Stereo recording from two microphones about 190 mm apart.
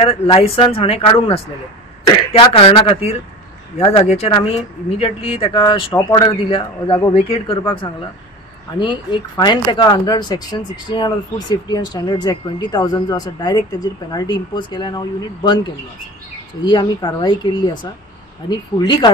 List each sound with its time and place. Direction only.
0.0 s speech: 30° left (ahead or behind)